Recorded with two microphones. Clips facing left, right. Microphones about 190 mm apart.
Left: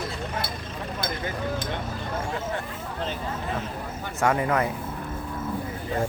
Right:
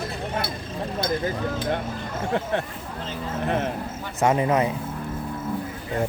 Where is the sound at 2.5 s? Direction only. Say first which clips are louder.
Right 4 dB; 70° right (ahead or behind).